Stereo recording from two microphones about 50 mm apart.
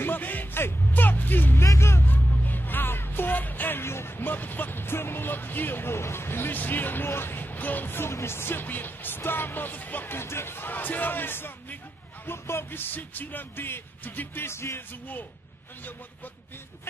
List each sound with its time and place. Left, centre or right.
0.0 s music: left
1.6 s music: left
2.0 s music: left
3.8 s music: left
6.5 s music: left
8.1 s music: left
10.1 s music: left
14.4 s music: left